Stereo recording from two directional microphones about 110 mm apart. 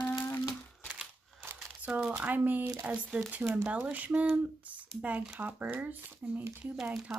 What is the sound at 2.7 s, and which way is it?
Speech, 10° right (ahead or behind).